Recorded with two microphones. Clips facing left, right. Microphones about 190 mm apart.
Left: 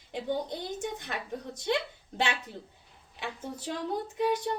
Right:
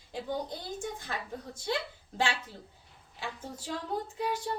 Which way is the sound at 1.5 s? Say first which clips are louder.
Left 4 dB; 20° left (ahead or behind).